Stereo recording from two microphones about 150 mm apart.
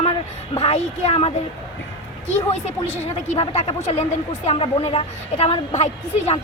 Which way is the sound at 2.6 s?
45° left (ahead or behind).